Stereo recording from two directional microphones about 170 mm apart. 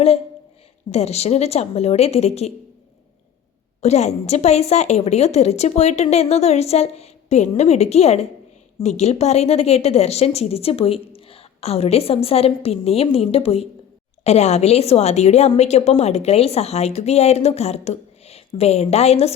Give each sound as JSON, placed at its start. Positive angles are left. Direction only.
{"t": 0.9, "sound": "a woman's voice", "side_deg": 40}
{"t": 3.8, "sound": "a woman's voice", "side_deg": 40}